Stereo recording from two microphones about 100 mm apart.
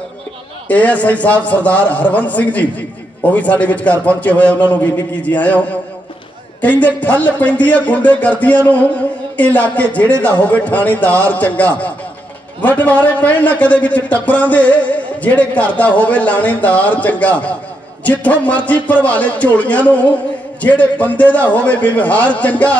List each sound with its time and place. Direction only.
0.7 s a man's voice: 15° left (ahead or behind)